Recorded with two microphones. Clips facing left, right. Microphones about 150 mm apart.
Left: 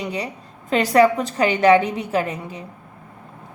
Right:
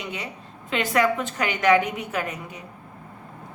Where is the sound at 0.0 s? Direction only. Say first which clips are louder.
Left 6 dB; 35° left (ahead or behind).